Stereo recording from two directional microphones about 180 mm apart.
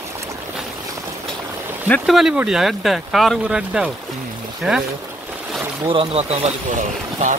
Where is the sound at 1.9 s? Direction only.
Centre (ahead or behind).